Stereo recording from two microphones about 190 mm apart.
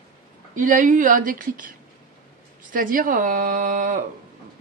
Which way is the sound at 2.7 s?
45° right (ahead or behind).